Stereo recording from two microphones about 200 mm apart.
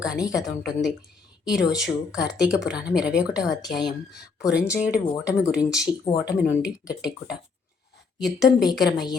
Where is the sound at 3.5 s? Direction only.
20° left (ahead or behind).